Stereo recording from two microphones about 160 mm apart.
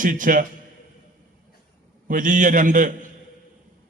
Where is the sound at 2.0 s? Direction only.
55° right (ahead or behind).